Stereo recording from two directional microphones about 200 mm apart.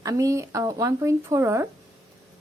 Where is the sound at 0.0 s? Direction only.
15° right (ahead or behind).